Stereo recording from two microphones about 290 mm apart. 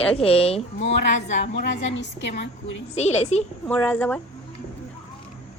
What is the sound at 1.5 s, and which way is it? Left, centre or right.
A woman's voice, left.